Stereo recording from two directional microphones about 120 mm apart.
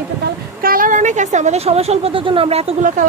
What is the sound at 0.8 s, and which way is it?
Speech, 90° right.